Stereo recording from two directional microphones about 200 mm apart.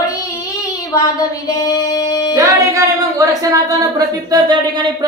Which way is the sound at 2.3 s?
15° right (ahead or behind).